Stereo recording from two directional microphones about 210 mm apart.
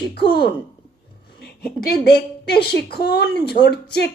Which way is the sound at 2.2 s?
50° left (ahead or behind).